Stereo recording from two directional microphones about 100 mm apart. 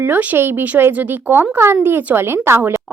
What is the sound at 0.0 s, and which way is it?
Speech, 20° right (ahead or behind).